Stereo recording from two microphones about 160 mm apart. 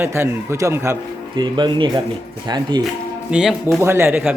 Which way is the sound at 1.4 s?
30° right (ahead or behind).